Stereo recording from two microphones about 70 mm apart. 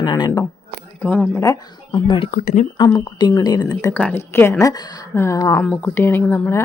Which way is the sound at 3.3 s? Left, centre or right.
Left.